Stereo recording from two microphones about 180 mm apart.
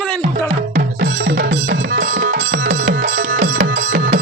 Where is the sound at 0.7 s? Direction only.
45° right (ahead or behind).